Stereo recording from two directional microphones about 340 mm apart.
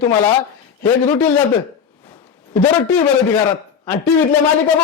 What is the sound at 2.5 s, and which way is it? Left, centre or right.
A man's voice, centre.